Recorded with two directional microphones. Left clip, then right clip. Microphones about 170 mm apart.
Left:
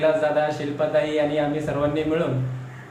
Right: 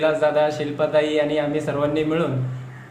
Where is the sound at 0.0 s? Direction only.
45° right (ahead or behind).